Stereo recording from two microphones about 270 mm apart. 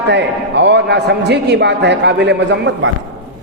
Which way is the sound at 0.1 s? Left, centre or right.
Right.